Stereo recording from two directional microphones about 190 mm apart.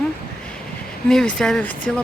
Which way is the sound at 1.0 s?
5° left (ahead or behind).